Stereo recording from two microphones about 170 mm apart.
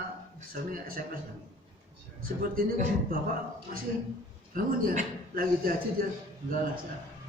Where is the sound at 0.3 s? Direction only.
55° right (ahead or behind).